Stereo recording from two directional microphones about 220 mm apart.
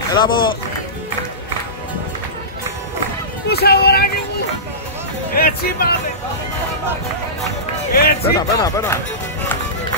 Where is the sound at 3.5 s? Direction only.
45° left (ahead or behind).